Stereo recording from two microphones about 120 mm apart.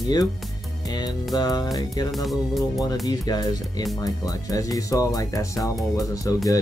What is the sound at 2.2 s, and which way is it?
Speech, centre (ahead or behind).